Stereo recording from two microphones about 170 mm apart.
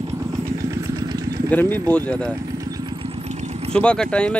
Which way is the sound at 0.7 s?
20° right (ahead or behind).